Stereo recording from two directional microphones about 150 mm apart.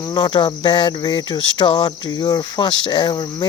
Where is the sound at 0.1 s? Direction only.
30° left (ahead or behind).